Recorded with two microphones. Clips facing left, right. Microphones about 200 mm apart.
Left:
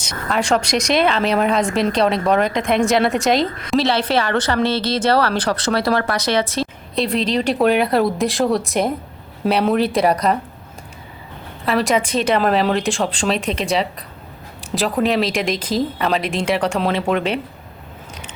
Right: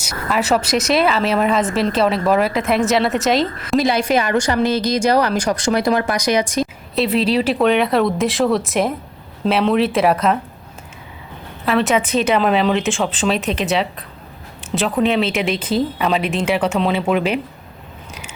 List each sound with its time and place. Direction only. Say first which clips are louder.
0.0 s speech: right 1 dB; 5° right (ahead or behind)
3.8 s speech: right 1 dB; 10° right (ahead or behind)
6.9 s speech: right 2 dB; 5° right (ahead or behind)
11.6 s speech: right 1 dB; centre (ahead or behind)
14.6 s speech: right 1 dB; centre (ahead or behind)